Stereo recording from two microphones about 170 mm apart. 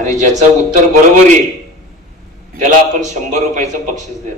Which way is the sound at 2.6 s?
45° right (ahead or behind).